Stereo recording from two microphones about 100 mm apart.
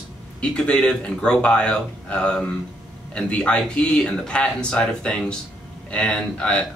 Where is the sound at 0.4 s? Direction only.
10° left (ahead or behind).